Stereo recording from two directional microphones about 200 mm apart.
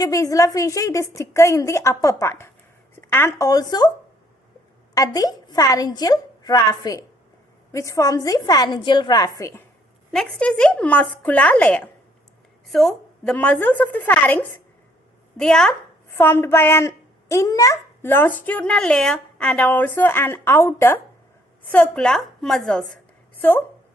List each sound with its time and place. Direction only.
0.0 s a child's voice: 15° left (ahead or behind)
4.9 s a woman's voice: 20° left (ahead or behind)